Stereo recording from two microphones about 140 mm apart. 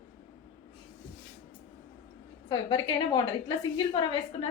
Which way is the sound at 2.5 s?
35° left (ahead or behind).